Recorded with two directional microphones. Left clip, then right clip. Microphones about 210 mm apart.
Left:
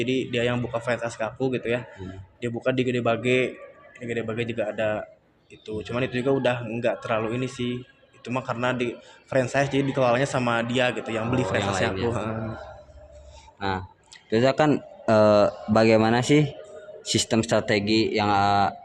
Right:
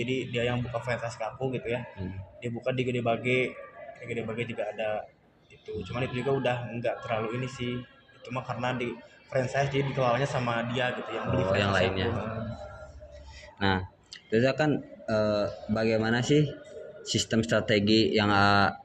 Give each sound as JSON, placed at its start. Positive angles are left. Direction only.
{"t": 0.0, "sound": "a man's voice", "side_deg": 45}
{"t": 13.6, "sound": "speech", "side_deg": 0}
{"t": 14.3, "sound": "a man's voice", "side_deg": 30}
{"t": 17.8, "sound": "mantra", "side_deg": 10}